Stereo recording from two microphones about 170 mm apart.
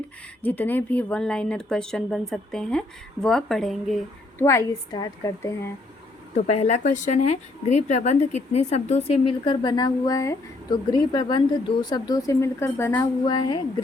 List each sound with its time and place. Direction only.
0.4 s speech: 10° left (ahead or behind)
4.4 s a woman's voice: 15° left (ahead or behind)
6.3 s a woman's voice: 40° left (ahead or behind)